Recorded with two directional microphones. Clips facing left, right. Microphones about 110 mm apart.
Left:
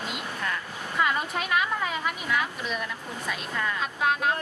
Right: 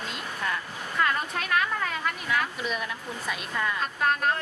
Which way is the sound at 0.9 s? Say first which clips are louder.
Left 1 dB; 10° left (ahead or behind).